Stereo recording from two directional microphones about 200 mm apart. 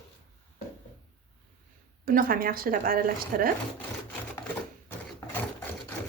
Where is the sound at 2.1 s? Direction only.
45° right (ahead or behind).